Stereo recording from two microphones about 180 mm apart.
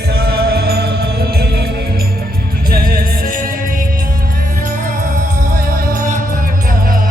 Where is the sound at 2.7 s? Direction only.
55° right (ahead or behind).